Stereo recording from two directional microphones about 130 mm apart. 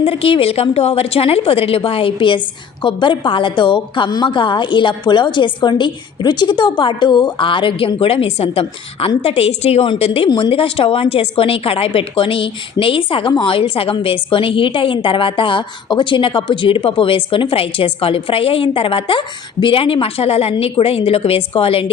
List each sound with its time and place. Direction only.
0.0 s a woman's voice: 50° left (ahead or behind)
10.2 s a woman's voice: 35° left (ahead or behind)